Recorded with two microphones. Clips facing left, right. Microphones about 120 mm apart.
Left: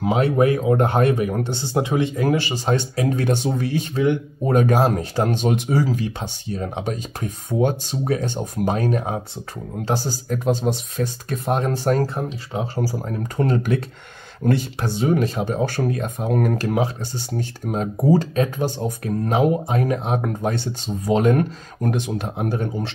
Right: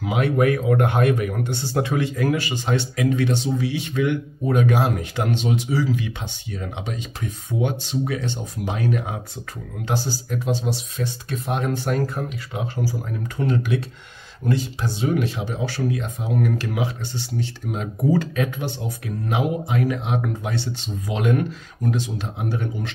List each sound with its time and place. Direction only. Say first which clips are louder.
0.0 s speech: left 2 dB; 30° left (ahead or behind)
14.4 s speech: left 3 dB; 60° left (ahead or behind)
15.0 s speech: left 3 dB; 40° left (ahead or behind)